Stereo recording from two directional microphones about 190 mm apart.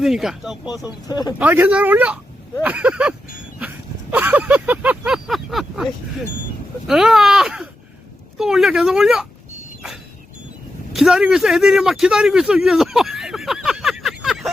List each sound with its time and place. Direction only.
0.0 s speech: centre (ahead or behind)
0.9 s speech: 20° left (ahead or behind)
1.4 s a sound: 10° right (ahead or behind)
6.8 s speech: centre (ahead or behind)
10.9 s speech: centre (ahead or behind)